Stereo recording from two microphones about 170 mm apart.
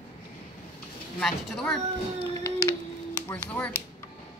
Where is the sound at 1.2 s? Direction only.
5° left (ahead or behind).